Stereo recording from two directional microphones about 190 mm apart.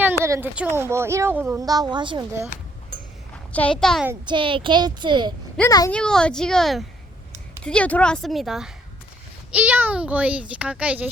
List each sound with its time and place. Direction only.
0.0 s speech: 10° right (ahead or behind)
3.5 s a woman's voice: 5° left (ahead or behind)
4.3 s a child's voice: 25° right (ahead or behind)
5.5 s a child's voice: 15° left (ahead or behind)
5.9 s a woman's voice: 5° left (ahead or behind)